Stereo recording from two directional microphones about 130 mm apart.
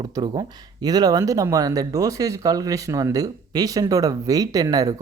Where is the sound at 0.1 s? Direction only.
30° right (ahead or behind).